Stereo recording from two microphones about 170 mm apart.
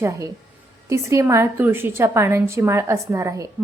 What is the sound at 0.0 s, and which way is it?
A woman's voice, 20° right (ahead or behind).